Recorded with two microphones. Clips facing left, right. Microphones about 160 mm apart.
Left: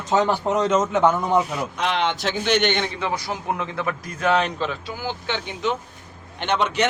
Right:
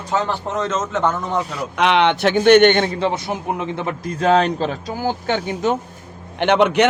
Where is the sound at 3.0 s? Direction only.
25° right (ahead or behind); by 5.8 s 45° right (ahead or behind).